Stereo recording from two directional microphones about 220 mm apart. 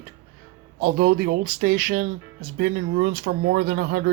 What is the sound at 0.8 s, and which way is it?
Speech, 45° right (ahead or behind).